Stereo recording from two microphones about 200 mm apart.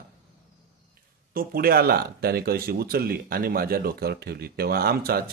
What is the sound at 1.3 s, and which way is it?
Speech, 45° right (ahead or behind).